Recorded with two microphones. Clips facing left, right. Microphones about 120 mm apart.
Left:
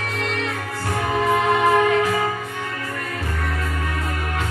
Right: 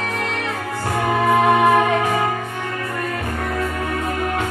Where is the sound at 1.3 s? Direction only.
35° right (ahead or behind).